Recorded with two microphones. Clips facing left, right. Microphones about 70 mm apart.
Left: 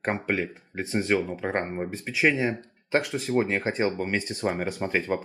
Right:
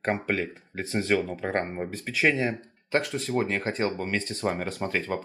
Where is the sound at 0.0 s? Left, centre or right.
Centre.